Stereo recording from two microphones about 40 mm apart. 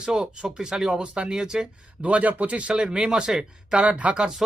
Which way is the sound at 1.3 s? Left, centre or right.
Centre.